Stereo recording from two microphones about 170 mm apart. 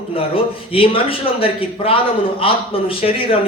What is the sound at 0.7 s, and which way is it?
A man's voice, 35° left (ahead or behind).